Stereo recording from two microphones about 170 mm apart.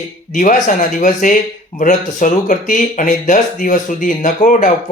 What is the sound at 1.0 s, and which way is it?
Speech, 50° left (ahead or behind).